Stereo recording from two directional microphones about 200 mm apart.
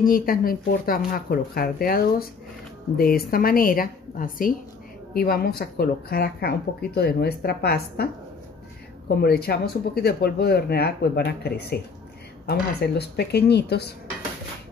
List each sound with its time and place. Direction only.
0.0 s speech: 45° left (ahead or behind)
9.2 s speech: 50° left (ahead or behind)